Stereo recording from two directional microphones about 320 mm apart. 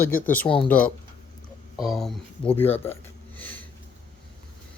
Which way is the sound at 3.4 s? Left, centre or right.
Centre.